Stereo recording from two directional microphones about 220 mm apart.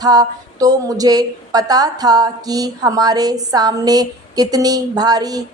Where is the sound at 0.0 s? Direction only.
15° right (ahead or behind).